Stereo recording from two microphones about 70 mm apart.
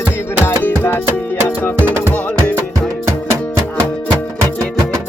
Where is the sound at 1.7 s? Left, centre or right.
Right.